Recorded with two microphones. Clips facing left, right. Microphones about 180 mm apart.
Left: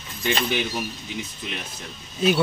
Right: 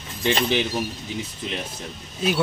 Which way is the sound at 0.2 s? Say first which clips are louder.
Right 3 dB; 30° right (ahead or behind).